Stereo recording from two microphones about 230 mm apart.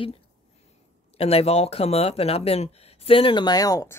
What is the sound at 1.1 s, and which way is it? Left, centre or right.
Speech, left.